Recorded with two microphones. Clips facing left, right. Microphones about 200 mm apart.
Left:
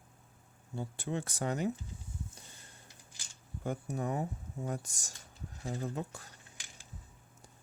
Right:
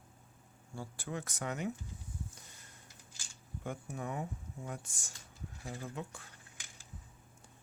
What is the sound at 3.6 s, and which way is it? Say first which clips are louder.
Speech: left 5 dB; 35° left (ahead or behind).